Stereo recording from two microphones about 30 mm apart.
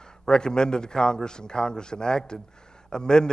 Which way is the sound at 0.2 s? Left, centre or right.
Left.